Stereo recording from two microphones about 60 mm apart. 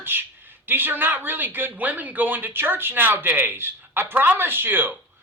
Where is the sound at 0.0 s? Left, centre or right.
Right.